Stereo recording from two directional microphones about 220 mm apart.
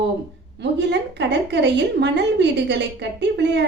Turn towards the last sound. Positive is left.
turn(degrees=-50)  # may be behind; listen again after turning